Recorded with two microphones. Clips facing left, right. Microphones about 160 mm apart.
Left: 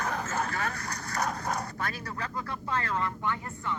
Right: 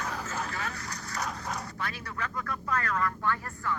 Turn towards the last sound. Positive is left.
turn(degrees=20)  # may be behind; listen again after turning